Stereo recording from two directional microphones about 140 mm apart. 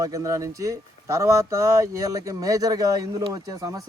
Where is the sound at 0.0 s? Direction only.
25° right (ahead or behind).